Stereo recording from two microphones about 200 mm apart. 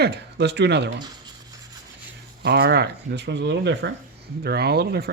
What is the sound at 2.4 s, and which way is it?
Speech, 55° right (ahead or behind).